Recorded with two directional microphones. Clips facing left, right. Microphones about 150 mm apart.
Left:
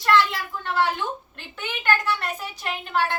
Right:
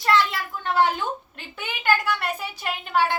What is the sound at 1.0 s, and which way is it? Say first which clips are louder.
A woman's voice: right 1 dB; 10° right (ahead or behind).